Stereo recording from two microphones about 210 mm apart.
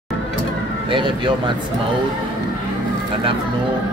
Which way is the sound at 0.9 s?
25° right (ahead or behind).